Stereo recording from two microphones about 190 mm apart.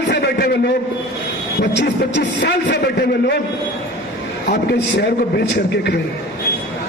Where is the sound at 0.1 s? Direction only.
60° left (ahead or behind).